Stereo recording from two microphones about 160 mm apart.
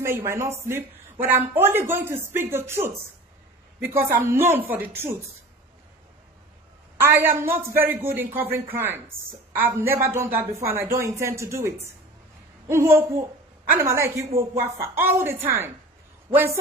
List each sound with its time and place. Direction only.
0.0 s speech: 15° right (ahead or behind)
7.0 s speech: 15° right (ahead or behind)